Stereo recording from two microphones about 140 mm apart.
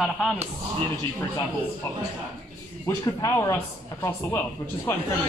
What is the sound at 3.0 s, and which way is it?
Speech, 25° left (ahead or behind).